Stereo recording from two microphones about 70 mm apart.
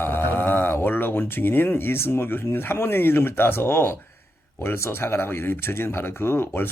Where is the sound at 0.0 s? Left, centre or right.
Left.